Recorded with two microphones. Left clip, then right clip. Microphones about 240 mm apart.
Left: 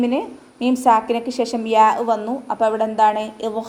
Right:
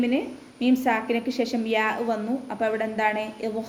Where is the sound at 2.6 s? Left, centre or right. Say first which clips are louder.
Left 8 dB; left.